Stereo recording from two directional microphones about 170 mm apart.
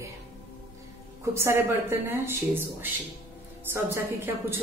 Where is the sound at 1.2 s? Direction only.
15° right (ahead or behind).